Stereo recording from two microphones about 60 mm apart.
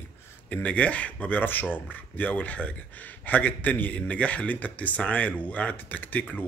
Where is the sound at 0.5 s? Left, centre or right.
Left.